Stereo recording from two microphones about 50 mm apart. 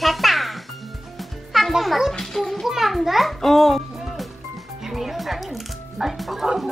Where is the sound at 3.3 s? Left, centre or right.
Centre.